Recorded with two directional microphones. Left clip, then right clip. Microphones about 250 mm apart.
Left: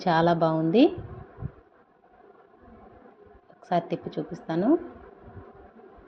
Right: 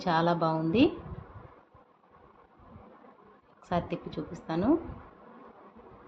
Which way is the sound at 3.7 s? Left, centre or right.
Centre.